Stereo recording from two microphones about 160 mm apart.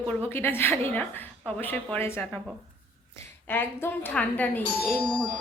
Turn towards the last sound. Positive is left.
turn(degrees=10)  # may be behind; listen again after turning